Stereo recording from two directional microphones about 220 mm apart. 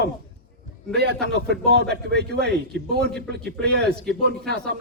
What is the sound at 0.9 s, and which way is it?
A man's voice, 50° right (ahead or behind).